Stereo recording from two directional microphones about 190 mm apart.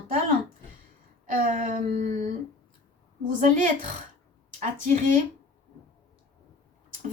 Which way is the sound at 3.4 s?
40° right (ahead or behind).